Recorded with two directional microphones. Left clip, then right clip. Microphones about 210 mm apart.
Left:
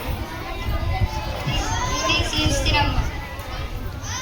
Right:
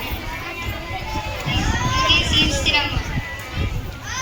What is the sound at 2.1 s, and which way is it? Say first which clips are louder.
Music: right 5 dB; 30° left (ahead or behind).